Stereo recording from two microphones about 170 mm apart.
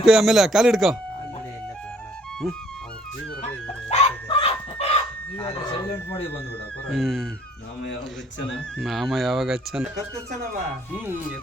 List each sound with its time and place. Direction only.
0.0 s speech: 5° right (ahead or behind)
3.8 s chicken: 35° left (ahead or behind)
5.4 s a sound: 15° left (ahead or behind)
6.8 s speech: centre (ahead or behind)
8.8 s speech: centre (ahead or behind)
11.0 s speech: 10° right (ahead or behind)